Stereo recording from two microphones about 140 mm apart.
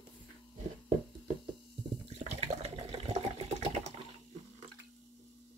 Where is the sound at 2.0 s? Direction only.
50° right (ahead or behind).